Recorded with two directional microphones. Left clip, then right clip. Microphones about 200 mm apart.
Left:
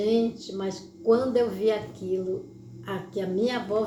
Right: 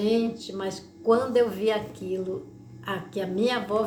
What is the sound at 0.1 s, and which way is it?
Speech, 25° right (ahead or behind).